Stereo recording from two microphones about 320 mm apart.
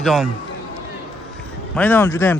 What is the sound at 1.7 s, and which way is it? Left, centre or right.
Speech, centre.